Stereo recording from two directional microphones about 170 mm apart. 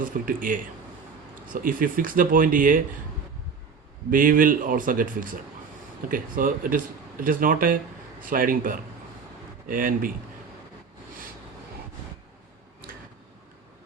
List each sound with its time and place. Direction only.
0.0 s speech: 55° right (ahead or behind)
4.1 s a man's voice: 55° right (ahead or behind)